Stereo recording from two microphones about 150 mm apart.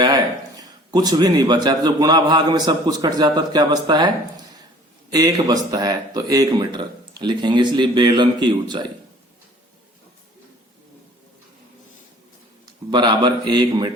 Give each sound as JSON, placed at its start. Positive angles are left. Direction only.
{"t": 0.0, "sound": "speech", "side_deg": -25}
{"t": 5.1, "sound": "speech", "side_deg": -25}
{"t": 12.9, "sound": "speech", "side_deg": -30}